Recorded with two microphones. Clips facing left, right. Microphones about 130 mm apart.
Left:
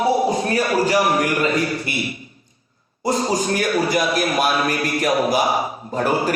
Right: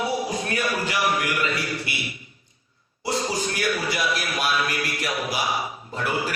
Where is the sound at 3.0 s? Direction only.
40° left (ahead or behind).